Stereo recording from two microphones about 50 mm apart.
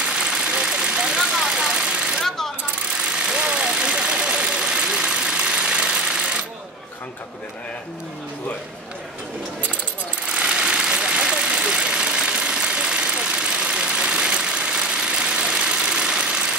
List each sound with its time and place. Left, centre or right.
0.0 s vehicle: centre
2.2 s coin: centre
3.0 s vehicle: centre
10.2 s vehicle: centre